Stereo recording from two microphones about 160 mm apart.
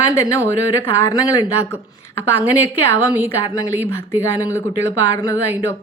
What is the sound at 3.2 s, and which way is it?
A woman's voice, 20° left (ahead or behind).